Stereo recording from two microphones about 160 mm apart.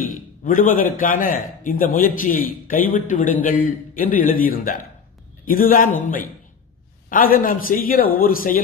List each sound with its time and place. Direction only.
0.0 s a man's voice: 60° left (ahead or behind)
7.1 s a man's voice: 60° left (ahead or behind)